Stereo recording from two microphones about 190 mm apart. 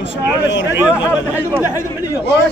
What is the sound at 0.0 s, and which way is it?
Speech, 70° left (ahead or behind).